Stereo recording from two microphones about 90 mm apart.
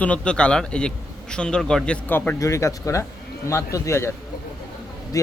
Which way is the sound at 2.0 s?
20° left (ahead or behind).